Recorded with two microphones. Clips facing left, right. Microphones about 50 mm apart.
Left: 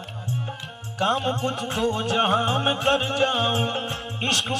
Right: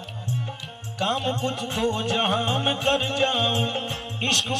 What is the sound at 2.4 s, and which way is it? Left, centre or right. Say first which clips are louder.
Music: left 2 dB; centre.